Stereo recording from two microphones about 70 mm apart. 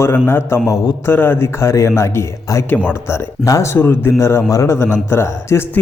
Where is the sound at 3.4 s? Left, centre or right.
Left.